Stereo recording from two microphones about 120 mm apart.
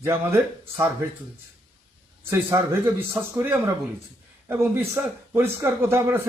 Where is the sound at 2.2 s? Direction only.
20° right (ahead or behind).